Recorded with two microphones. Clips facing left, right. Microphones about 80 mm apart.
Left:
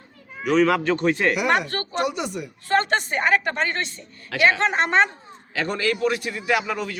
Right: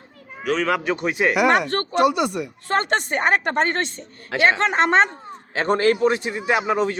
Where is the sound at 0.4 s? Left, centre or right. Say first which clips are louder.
Left 3 dB; centre.